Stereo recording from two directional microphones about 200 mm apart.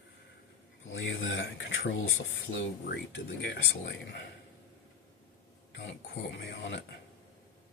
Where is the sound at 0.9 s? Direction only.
70° left (ahead or behind).